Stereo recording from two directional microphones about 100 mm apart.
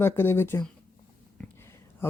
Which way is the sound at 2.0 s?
25° left (ahead or behind).